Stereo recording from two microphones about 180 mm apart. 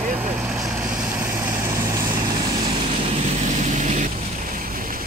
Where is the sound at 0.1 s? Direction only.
5° right (ahead or behind); by 4.1 s 40° right (ahead or behind).